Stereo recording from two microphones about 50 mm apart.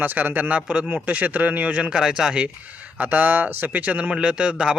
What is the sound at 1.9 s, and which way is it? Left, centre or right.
Speech, centre.